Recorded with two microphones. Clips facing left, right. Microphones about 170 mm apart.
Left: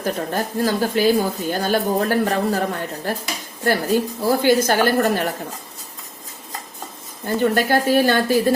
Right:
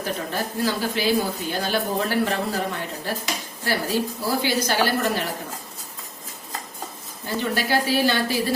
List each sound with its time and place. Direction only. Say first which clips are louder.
0.0 s speech: left 4 dB; 45° left (ahead or behind)
7.3 s speech: left 6 dB; 50° left (ahead or behind)